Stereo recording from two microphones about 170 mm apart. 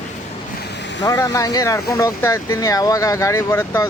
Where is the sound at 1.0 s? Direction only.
20° left (ahead or behind).